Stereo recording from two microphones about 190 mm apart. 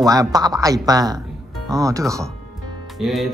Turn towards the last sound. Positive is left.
turn(degrees=0)  # may be behind; listen again after turning